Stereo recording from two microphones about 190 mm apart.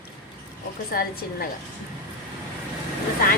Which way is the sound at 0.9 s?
50° left (ahead or behind).